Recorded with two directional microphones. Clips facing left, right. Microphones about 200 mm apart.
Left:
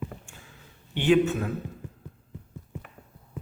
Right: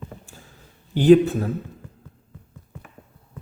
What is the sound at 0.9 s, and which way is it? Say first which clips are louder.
Speech: right 7 dB; 35° right (ahead or behind).